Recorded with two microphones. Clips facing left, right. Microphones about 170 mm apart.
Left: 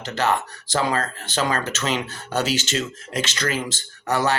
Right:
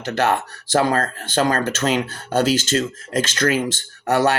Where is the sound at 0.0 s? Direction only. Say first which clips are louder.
Right 3 dB; 55° right (ahead or behind).